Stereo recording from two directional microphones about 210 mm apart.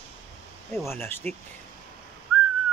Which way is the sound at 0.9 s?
10° left (ahead or behind).